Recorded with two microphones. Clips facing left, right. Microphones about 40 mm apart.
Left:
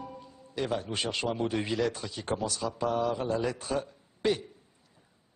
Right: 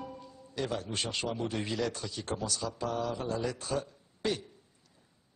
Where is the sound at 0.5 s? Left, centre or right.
Centre.